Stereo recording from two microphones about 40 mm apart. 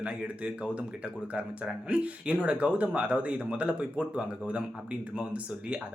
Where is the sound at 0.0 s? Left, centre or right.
Right.